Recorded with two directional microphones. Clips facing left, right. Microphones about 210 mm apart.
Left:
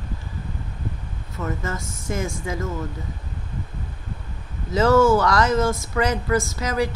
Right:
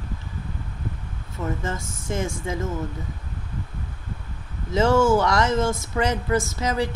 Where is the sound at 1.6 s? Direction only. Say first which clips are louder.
Even; 25° right (ahead or behind).